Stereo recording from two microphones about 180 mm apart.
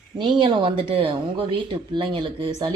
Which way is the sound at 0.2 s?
25° right (ahead or behind).